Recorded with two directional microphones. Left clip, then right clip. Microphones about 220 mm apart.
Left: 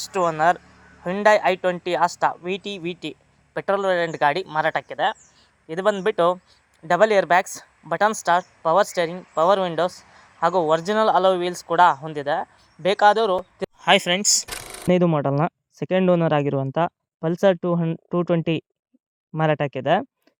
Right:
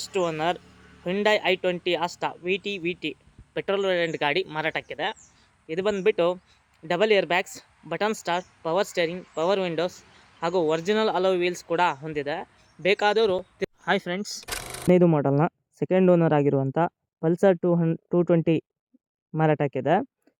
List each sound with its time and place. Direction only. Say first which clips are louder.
0.0 s speech: left 6 dB; 5° left (ahead or behind)
13.8 s speech: left 10 dB; 20° left (ahead or behind)
14.4 s speech: even; centre (ahead or behind)